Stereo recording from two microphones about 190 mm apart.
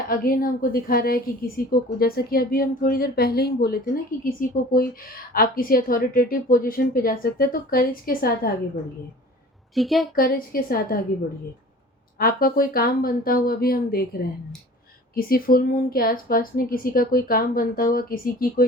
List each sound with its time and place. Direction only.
0.1 s a woman's voice: 50° left (ahead or behind)
9.7 s a woman's voice: centre (ahead or behind)
10.5 s a woman's voice: 50° left (ahead or behind)
12.2 s a woman's voice: 50° left (ahead or behind)